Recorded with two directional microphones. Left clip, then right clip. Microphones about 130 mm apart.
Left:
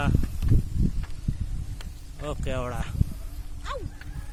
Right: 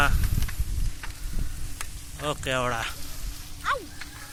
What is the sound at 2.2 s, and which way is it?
Speech, 10° right (ahead or behind).